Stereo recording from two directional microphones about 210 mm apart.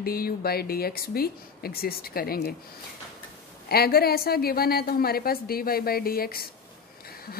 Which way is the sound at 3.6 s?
45° left (ahead or behind).